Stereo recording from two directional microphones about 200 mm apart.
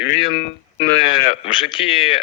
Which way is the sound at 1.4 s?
25° left (ahead or behind).